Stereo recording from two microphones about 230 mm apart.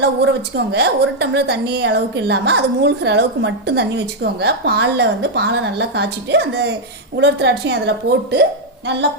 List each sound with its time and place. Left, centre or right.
0.2 s a woman's voice: right